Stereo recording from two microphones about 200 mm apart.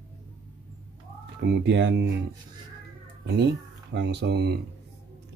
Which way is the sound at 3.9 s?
55° right (ahead or behind).